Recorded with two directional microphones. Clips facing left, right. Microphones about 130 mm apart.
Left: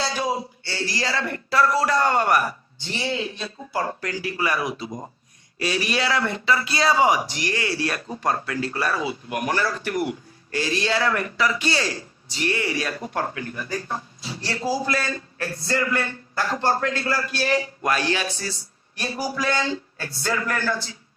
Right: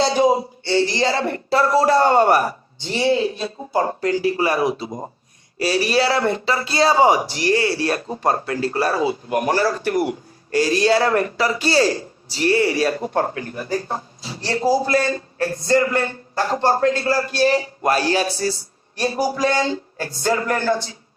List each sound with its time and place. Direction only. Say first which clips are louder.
0.0 s a man's voice: right 9 dB; 25° right (ahead or behind)